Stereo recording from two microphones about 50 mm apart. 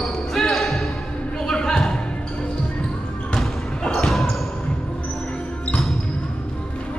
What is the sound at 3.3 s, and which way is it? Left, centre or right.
Basketball bounce, centre.